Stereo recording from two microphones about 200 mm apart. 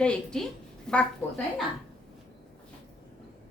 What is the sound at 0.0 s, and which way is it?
A woman's voice, 5° left (ahead or behind).